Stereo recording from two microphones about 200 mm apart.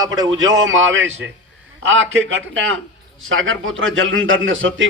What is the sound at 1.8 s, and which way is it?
A man's voice, 75° right (ahead or behind).